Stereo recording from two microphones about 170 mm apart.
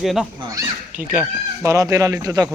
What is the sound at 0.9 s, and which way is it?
Speech, 10° right (ahead or behind).